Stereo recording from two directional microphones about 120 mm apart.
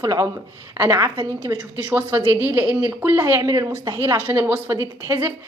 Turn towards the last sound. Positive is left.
turn(degrees=-20)  # may be behind; listen again after turning